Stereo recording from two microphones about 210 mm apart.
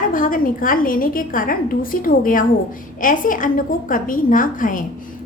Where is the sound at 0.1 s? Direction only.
40° left (ahead or behind).